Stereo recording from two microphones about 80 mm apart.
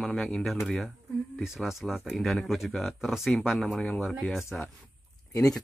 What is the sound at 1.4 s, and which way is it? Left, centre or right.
Speech, centre.